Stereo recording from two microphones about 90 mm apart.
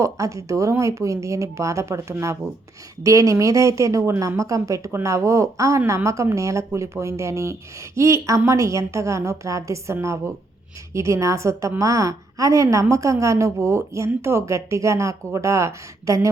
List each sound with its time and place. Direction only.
0.0 s a woman's voice: 35° right (ahead or behind)